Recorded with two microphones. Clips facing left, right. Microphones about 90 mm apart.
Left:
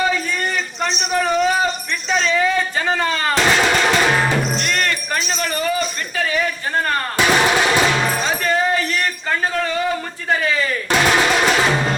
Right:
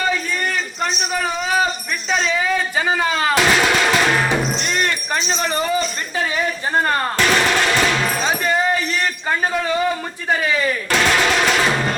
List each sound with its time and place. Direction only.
0.9 s a sound: 5° right (ahead or behind)
2.0 s music: 5° right (ahead or behind)
4.3 s music: 15° right (ahead or behind)
5.2 s speech: 25° right (ahead or behind)
6.1 s music: 20° right (ahead or behind)
7.2 s music: 10° left (ahead or behind)
10.9 s drum: 5° left (ahead or behind)